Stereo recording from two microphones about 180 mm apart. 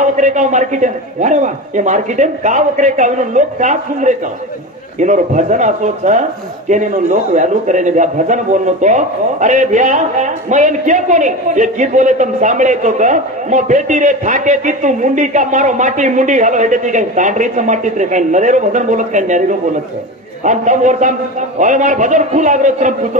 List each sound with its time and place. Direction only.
0.0 s a man's voice: 45° right (ahead or behind)
20.4 s a man's voice: 45° right (ahead or behind)